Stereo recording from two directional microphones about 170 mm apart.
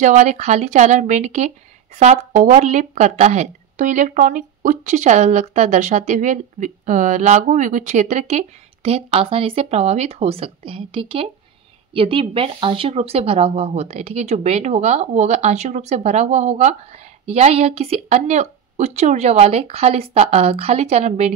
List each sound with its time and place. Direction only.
0.0 s speech: 45° right (ahead or behind)